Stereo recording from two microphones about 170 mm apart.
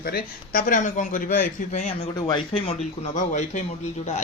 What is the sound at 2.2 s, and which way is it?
Speech, 25° left (ahead or behind).